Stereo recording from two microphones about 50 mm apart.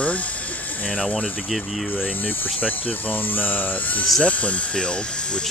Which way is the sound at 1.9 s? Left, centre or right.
Left.